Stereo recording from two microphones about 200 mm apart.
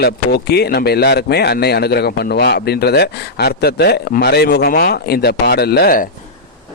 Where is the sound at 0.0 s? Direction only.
55° left (ahead or behind).